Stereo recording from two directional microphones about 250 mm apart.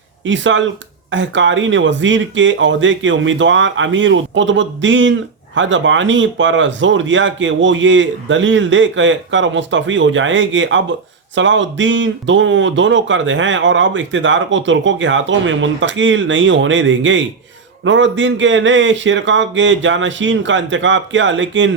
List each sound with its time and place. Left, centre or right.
0.3 s speech: right